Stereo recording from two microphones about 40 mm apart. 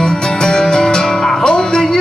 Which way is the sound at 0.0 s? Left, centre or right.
Left.